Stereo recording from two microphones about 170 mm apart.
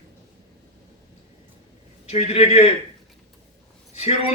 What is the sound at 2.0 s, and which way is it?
Speech, 35° left (ahead or behind).